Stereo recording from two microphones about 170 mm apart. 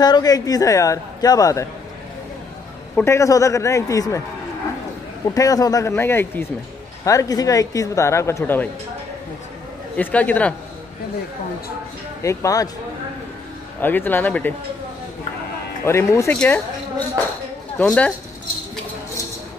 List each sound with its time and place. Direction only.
0.0 s a man's voice: 20° left (ahead or behind)
3.0 s a man's voice: 15° left (ahead or behind)
5.3 s a man's voice: 20° left (ahead or behind)
9.9 s a man's voice: 10° left (ahead or behind)
12.2 s a man's voice: 20° left (ahead or behind)
13.7 s a man's voice: 10° left (ahead or behind)
15.8 s a man's voice: 15° left (ahead or behind)
17.7 s a man's voice: 5° left (ahead or behind)